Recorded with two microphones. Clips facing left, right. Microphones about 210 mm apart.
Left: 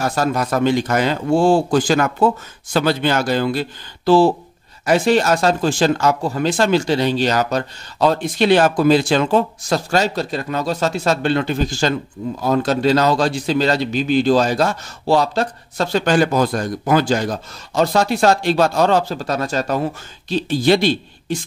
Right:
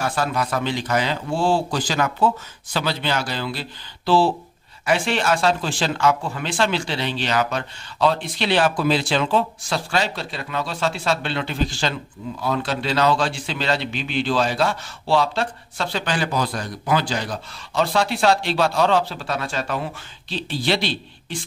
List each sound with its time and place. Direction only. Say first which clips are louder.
0.0 s a man's voice: left 4 dB; 40° left (ahead or behind)